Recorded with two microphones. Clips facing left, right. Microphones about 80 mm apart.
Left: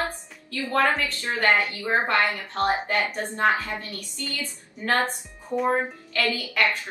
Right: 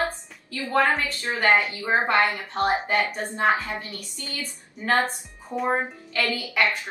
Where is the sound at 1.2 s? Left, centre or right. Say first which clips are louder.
Right 1 dB; centre.